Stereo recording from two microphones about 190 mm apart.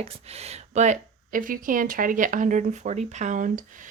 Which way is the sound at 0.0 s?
35° right (ahead or behind).